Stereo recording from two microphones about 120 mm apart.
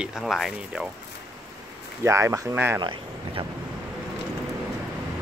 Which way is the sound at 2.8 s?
45° right (ahead or behind).